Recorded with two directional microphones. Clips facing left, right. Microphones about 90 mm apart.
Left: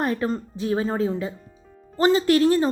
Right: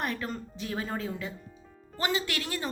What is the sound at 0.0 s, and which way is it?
A woman's voice, 30° left (ahead or behind).